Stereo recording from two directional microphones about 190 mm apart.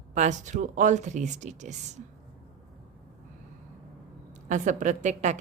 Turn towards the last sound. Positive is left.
turn(degrees=-40)  # may be behind; listen again after turning